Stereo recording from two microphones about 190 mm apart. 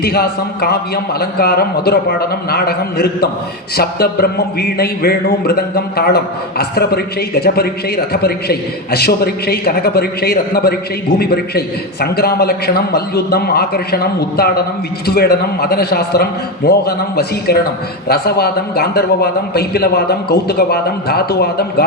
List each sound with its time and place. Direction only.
0.0 s a man's voice: 55° left (ahead or behind)